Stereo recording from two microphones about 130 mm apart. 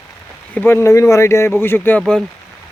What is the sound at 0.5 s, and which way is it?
Speech, 20° left (ahead or behind).